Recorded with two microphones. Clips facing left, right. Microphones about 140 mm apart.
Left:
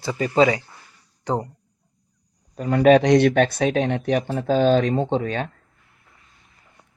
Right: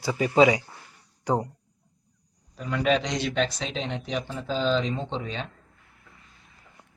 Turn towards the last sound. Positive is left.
turn(degrees=55)  # may be behind; listen again after turning